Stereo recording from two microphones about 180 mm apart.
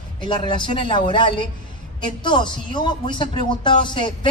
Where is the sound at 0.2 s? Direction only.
25° left (ahead or behind).